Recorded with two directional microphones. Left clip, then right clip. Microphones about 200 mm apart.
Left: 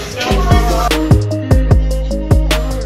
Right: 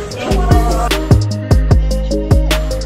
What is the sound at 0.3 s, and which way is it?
Music, centre (ahead or behind).